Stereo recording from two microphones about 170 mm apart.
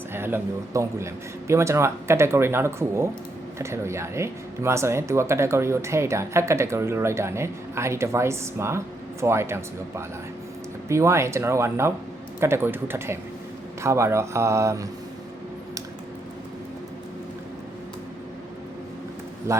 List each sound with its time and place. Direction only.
0.1 s speech: 15° right (ahead or behind)
19.5 s speech: 15° right (ahead or behind)